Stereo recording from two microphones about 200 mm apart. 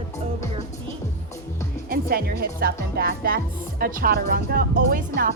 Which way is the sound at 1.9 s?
50° right (ahead or behind).